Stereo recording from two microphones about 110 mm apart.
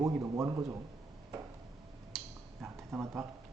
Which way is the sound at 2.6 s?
20° right (ahead or behind).